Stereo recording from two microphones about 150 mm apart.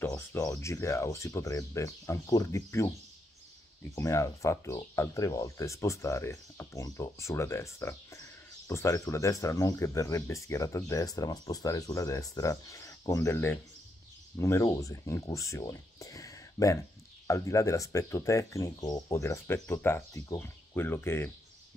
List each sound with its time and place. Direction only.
0.3 s speech: 20° left (ahead or behind)
3.9 s speech: 20° left (ahead or behind)